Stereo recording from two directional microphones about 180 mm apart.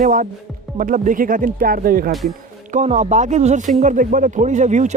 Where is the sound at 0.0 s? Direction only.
50° right (ahead or behind).